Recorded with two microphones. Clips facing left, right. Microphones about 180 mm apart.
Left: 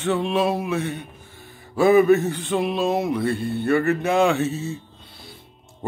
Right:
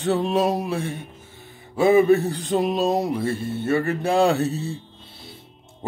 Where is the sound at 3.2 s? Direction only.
25° right (ahead or behind).